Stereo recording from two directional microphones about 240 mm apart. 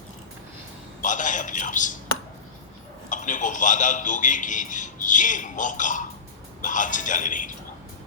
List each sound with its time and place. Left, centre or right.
1.0 s a man's voice: left
3.1 s a man's voice: left